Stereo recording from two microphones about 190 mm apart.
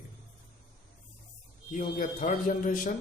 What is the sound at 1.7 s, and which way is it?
A man's voice, 45° left (ahead or behind).